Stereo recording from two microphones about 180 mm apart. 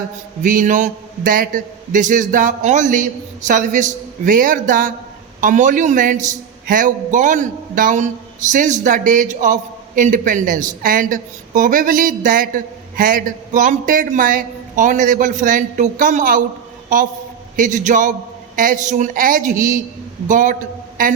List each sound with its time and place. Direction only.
0.4 s a man's voice: 45° right (ahead or behind)